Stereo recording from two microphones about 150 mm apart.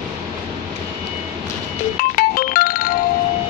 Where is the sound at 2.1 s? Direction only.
75° left (ahead or behind).